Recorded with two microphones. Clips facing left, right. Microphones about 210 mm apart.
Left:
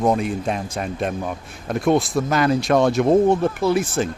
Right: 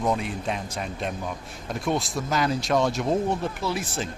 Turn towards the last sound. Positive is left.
turn(degrees=50)  # may be behind; listen again after turning